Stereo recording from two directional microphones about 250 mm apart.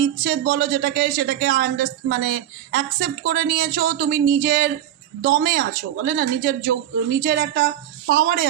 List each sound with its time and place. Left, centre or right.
0.0 s speech: right